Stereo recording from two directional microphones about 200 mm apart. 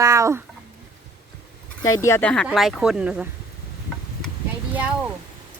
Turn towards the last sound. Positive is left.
turn(degrees=-5)  # may be behind; listen again after turning